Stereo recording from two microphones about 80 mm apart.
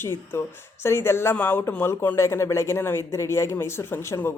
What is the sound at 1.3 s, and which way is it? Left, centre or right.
Speech, centre.